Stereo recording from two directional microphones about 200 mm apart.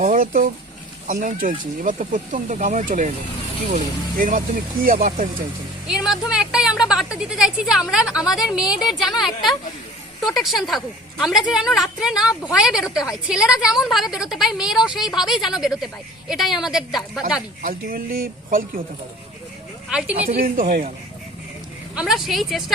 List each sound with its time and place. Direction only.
0.0 s speech: 40° right (ahead or behind)
5.9 s a woman's voice: centre (ahead or behind)
17.6 s speech: 45° right (ahead or behind)
19.9 s a woman's voice: 5° right (ahead or behind)
20.1 s speech: 45° right (ahead or behind)
21.9 s a woman's voice: centre (ahead or behind)